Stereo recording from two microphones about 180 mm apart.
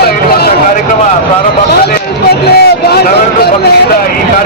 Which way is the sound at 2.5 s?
65° left (ahead or behind).